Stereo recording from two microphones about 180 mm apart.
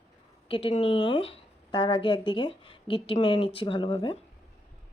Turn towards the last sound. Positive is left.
turn(degrees=30)  # may be behind; listen again after turning